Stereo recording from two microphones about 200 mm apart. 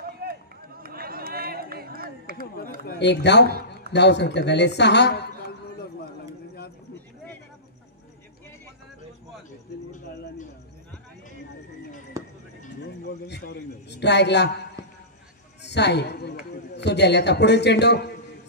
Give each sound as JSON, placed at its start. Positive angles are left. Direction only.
{"t": 0.0, "sound": "run", "side_deg": -50}
{"t": 2.8, "sound": "a man's voice", "side_deg": 55}
{"t": 12.2, "sound": "basketball bounce", "side_deg": -15}
{"t": 13.0, "sound": "a sound", "side_deg": 60}
{"t": 15.6, "sound": "a sound", "side_deg": 60}
{"t": 16.7, "sound": "a man's voice", "side_deg": 60}